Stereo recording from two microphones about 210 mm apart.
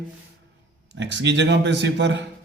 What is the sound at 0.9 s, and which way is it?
Speech, 55° right (ahead or behind).